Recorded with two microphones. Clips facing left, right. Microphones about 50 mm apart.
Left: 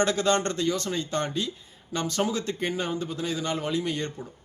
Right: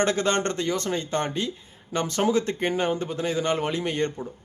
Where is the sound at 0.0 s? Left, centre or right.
Right.